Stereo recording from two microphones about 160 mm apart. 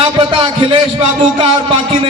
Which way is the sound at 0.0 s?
35° right (ahead or behind).